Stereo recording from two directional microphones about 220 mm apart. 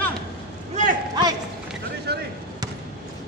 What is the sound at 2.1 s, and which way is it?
Basketball bounce, 50° right (ahead or behind).